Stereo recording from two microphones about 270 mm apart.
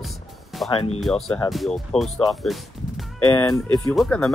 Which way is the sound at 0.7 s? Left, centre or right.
Left.